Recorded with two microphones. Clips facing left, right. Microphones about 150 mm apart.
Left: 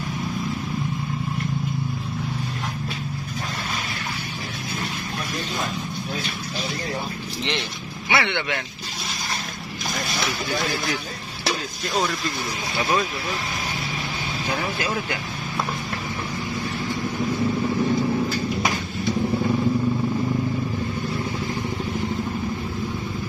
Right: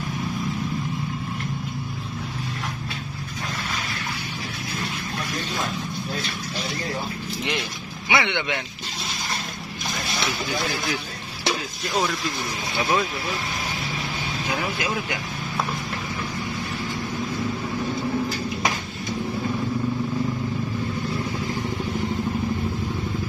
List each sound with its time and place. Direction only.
8.1 s speech: 15° right (ahead or behind)
11.4 s a sound: 5° right (ahead or behind)
14.5 s speech: 10° right (ahead or behind)